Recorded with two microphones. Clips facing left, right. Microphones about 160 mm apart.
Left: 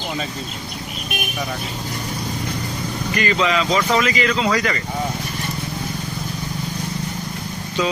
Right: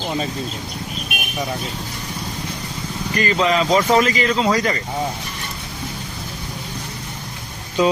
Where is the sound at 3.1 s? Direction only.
40° right (ahead or behind).